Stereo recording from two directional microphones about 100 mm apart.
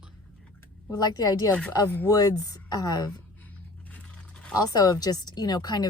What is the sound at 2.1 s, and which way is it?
Speech, 40° left (ahead or behind).